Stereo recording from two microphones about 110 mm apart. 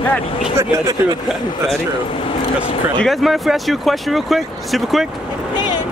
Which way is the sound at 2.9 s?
Centre (ahead or behind).